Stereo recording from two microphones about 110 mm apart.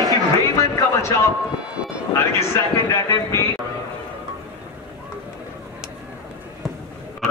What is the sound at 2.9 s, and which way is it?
Speech, 25° left (ahead or behind).